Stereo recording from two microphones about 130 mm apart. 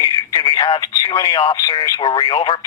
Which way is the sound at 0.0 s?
30° left (ahead or behind).